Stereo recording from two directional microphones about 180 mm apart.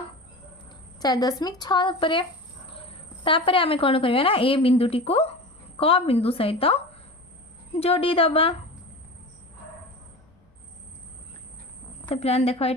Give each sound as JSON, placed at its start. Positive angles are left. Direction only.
{"t": 0.9, "sound": "a woman's voice", "side_deg": 20}
{"t": 12.0, "sound": "a woman's voice", "side_deg": 35}